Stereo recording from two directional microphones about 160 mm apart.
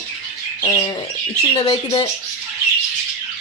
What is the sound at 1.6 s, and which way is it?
Speech, 30° left (ahead or behind).